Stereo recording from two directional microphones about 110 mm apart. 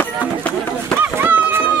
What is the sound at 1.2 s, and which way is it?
Run, 20° right (ahead or behind).